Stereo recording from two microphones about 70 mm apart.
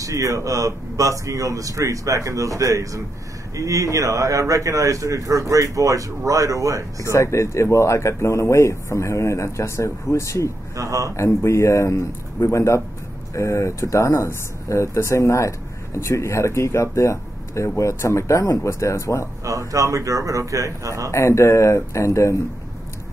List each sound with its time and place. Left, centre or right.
0.0 s speech: right
7.0 s speech: left
10.8 s speech: right
11.1 s speech: left
19.7 s speech: right
21.1 s speech: left